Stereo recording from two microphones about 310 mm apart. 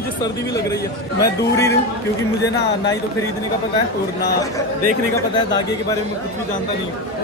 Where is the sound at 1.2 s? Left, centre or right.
Centre.